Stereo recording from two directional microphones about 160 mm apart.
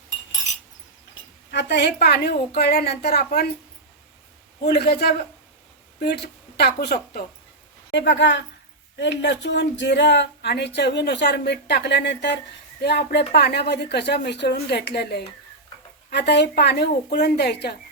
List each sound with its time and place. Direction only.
1.5 s speech: 90° left
4.6 s a man's voice: 85° left
6.0 s speech: 90° left